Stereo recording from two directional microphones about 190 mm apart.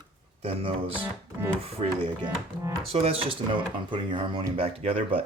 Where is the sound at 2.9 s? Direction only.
30° right (ahead or behind).